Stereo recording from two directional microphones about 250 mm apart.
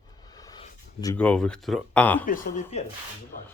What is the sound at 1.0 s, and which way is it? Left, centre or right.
Speech, centre.